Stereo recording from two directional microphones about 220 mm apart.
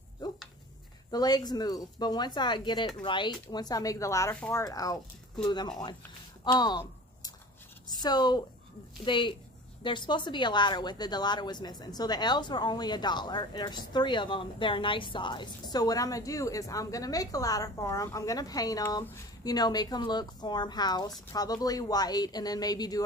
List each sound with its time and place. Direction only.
1.1 s a woman's voice: 20° left (ahead or behind)
6.4 s a sound: 20° left (ahead or behind)
7.9 s a woman's voice: 20° left (ahead or behind)